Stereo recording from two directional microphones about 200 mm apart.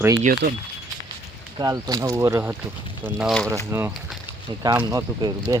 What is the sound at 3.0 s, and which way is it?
Speech, centre (ahead or behind).